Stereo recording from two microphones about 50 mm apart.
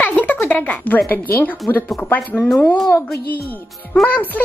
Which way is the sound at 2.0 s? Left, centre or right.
Left.